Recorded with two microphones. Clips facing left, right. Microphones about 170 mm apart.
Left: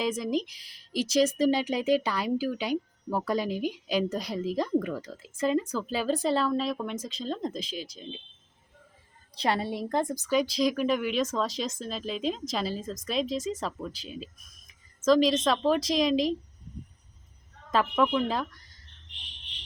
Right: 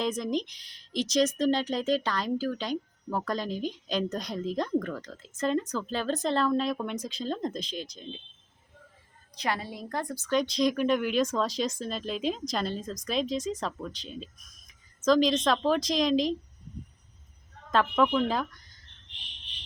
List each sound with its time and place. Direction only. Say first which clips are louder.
0.0 s speech: left 1 dB; 5° left (ahead or behind)
9.3 s a woman's voice: left 4 dB; 30° left (ahead or behind)
10.2 s speech: right 2 dB; 5° left (ahead or behind)
14.7 s a sound: left 1 dB; centre (ahead or behind)
15.4 s speech: left 1 dB; centre (ahead or behind)
17.7 s speech: even; centre (ahead or behind)